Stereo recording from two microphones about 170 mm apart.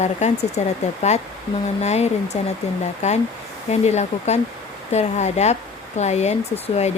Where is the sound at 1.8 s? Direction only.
40° left (ahead or behind).